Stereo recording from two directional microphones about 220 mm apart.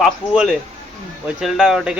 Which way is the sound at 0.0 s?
Centre (ahead or behind).